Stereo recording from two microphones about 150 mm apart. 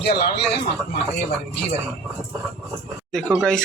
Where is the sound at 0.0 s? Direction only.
90° left.